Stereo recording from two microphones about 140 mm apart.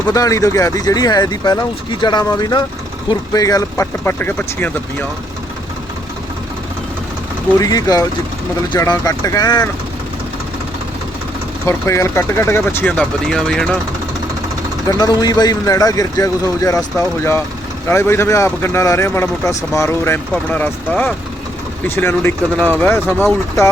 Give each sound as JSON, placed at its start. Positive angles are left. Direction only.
{"t": 0.1, "sound": "speech", "side_deg": 25}
{"t": 7.6, "sound": "speech", "side_deg": 25}
{"t": 11.6, "sound": "speech", "side_deg": 20}
{"t": 14.8, "sound": "speech", "side_deg": 25}